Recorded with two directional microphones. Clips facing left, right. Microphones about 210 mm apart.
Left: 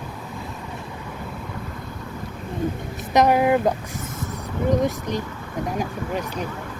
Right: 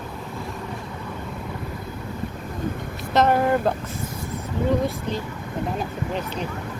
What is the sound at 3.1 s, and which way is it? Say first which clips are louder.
Speech: left 2 dB; 15° left (ahead or behind).